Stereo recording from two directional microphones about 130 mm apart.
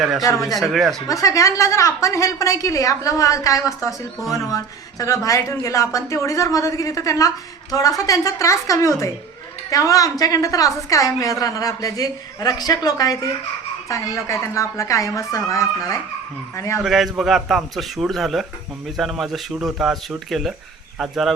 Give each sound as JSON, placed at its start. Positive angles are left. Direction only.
{"t": 0.2, "sound": "a woman's voice", "side_deg": 25}
{"t": 0.6, "sound": "a man's voice", "side_deg": 0}
{"t": 1.0, "sound": "a woman's voice", "side_deg": 25}
{"t": 16.8, "sound": "a man's voice", "side_deg": 0}